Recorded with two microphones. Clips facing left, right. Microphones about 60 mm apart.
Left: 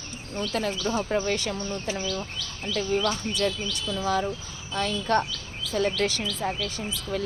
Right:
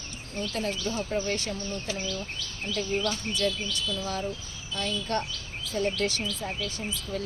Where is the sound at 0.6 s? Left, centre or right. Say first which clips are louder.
Left 3 dB; left.